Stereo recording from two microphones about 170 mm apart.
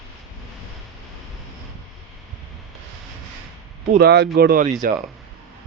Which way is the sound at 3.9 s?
75° right (ahead or behind).